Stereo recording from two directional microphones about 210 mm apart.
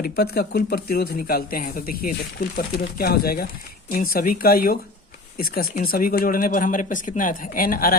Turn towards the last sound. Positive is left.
turn(degrees=45)  # may be behind; listen again after turning